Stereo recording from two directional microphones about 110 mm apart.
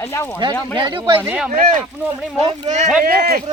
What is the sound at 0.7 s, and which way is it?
Speech, 45° right (ahead or behind).